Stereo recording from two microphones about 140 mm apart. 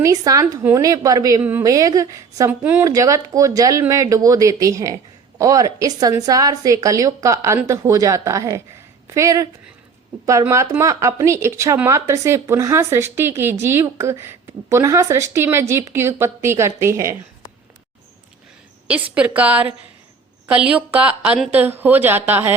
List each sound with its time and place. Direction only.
0.0 s speech: 25° right (ahead or behind)
1.4 s speech: 15° right (ahead or behind)
1.6 s speech: 25° right (ahead or behind)
2.5 s speech: 15° right (ahead or behind)
2.8 s speech: 25° right (ahead or behind)
18.9 s speech: 10° right (ahead or behind)